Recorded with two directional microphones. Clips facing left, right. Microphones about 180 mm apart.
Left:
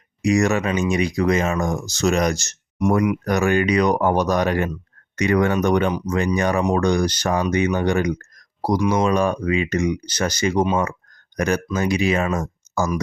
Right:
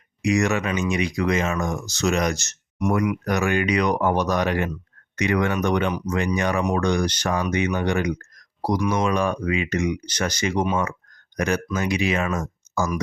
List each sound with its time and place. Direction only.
0.2 s speech: 35° left (ahead or behind)
8.8 s speech: 20° left (ahead or behind)
9.0 s speech: 35° left (ahead or behind)